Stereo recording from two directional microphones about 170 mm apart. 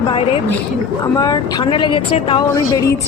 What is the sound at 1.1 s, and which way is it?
A woman's voice, 20° left (ahead or behind).